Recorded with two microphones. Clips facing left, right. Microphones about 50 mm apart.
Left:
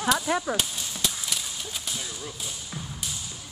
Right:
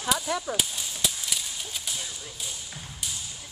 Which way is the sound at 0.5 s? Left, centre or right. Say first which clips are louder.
Left 1 dB; centre.